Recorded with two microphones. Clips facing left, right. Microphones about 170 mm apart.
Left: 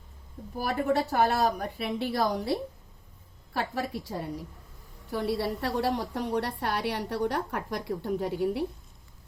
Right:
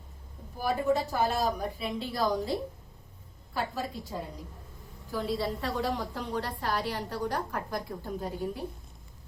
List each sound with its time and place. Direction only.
0.6 s a woman's voice: 70° left (ahead or behind)